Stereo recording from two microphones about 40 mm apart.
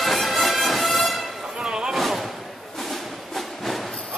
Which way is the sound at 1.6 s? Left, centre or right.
Right.